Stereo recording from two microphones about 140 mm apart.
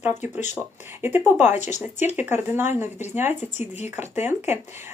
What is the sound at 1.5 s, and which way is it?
Speech, 55° left (ahead or behind).